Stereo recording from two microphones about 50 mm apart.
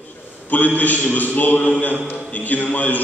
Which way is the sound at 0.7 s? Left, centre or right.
Left.